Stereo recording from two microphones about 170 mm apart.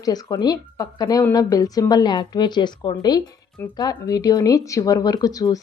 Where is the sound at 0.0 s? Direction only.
20° left (ahead or behind).